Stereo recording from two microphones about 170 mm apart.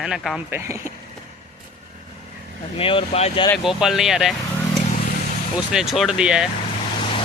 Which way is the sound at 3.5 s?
Centre (ahead or behind).